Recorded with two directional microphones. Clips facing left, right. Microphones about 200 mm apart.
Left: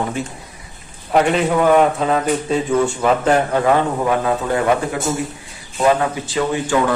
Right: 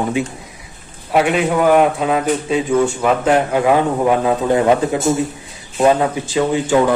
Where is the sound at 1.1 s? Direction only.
5° right (ahead or behind); by 6.7 s 20° right (ahead or behind).